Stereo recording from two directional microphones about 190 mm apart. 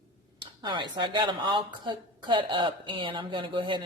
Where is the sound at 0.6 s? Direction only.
25° right (ahead or behind).